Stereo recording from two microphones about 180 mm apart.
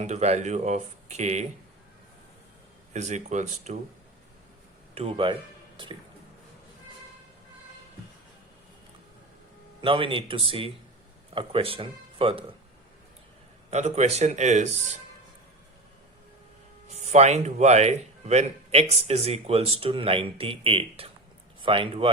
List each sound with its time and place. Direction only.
0.0 s speech: 40° right (ahead or behind)
2.9 s speech: 40° right (ahead or behind)
4.9 s speech: 30° right (ahead or behind)
9.8 s speech: 30° right (ahead or behind)
13.7 s speech: 40° right (ahead or behind)
16.9 s speech: 40° right (ahead or behind)